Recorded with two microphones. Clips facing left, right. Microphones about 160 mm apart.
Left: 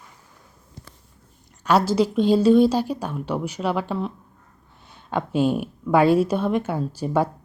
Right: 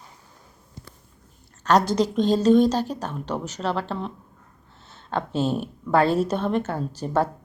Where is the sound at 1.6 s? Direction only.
5° left (ahead or behind).